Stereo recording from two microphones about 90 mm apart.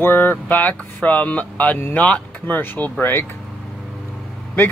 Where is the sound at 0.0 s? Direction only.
25° left (ahead or behind).